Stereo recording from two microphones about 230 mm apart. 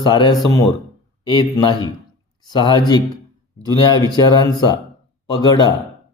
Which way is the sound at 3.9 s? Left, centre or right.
Centre.